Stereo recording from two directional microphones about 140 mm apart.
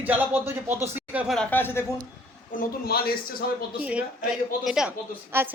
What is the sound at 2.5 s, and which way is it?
Speech, 85° left.